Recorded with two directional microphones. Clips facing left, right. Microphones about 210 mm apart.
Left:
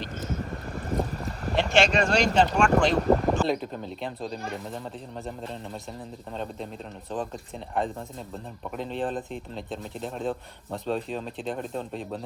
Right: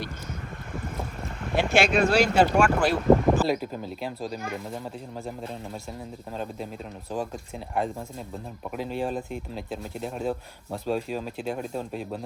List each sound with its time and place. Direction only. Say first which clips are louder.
0.8 s boat: left 6 dB; 35° left (ahead or behind)
1.5 s speech: right 1 dB; 10° right (ahead or behind)
6.3 s speech: right 1 dB; 5° right (ahead or behind)
8.7 s speech: right 1 dB; 5° right (ahead or behind)